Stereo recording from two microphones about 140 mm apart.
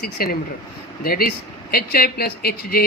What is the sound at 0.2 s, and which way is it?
Speech, 90° left.